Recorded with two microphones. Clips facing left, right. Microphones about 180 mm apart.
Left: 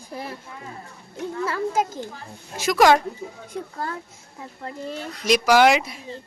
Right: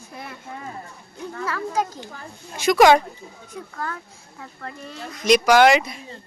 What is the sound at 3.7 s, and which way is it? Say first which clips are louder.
Speech: right 1 dB; 30° left (ahead or behind).